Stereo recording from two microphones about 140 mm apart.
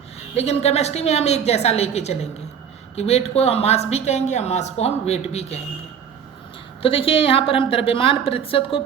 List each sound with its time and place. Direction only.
0.3 s speech: 50° left (ahead or behind)
6.8 s a woman's voice: 40° left (ahead or behind)